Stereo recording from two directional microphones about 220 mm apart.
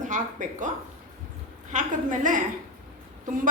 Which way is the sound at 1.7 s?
35° right (ahead or behind).